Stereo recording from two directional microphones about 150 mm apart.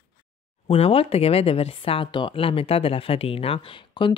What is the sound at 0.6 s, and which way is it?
Speech, 40° left (ahead or behind).